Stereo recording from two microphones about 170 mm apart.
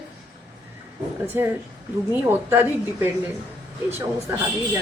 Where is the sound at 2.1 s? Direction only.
10° right (ahead or behind).